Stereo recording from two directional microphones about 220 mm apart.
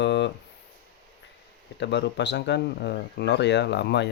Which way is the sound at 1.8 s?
50° left (ahead or behind).